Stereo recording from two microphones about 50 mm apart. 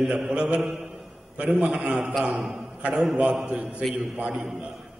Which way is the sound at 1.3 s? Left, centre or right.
Right.